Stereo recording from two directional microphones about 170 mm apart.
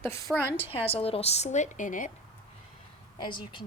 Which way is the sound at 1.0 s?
35° left (ahead or behind).